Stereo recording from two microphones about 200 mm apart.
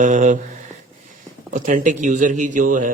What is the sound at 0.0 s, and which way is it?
Speech, 40° right (ahead or behind).